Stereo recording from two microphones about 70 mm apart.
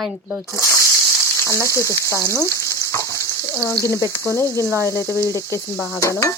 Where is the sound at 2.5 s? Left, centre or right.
Left.